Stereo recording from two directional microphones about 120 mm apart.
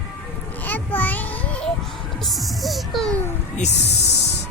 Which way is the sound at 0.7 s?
15° left (ahead or behind).